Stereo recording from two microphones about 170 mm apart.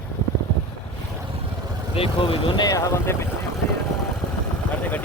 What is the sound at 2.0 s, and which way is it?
Speech, 30° left (ahead or behind).